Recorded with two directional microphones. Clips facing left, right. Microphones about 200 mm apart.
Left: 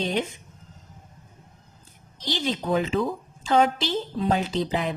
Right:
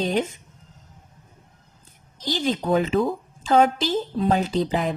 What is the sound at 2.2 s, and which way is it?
A woman's voice, 50° right (ahead or behind).